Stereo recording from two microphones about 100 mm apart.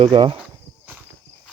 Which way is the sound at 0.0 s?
55° right (ahead or behind).